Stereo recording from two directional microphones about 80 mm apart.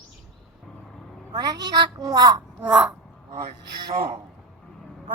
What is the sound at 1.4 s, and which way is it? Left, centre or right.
Speech, right.